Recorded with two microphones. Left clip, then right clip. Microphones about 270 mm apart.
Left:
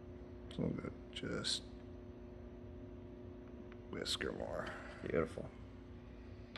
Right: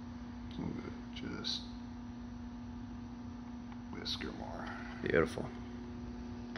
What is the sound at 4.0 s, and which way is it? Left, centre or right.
Speech, left.